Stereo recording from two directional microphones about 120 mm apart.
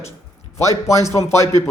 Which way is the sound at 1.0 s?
25° left (ahead or behind).